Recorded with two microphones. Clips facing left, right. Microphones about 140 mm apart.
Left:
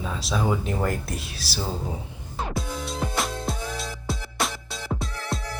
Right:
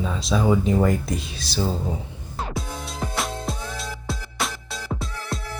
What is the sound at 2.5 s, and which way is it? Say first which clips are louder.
Music: left 1 dB; centre (ahead or behind).